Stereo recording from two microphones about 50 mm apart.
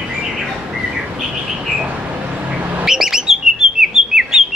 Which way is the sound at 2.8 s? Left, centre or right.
Centre.